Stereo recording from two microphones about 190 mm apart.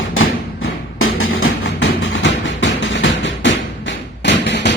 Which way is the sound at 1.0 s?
90° left.